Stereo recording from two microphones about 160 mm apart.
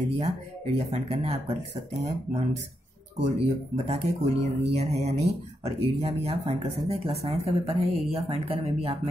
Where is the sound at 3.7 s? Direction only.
40° right (ahead or behind).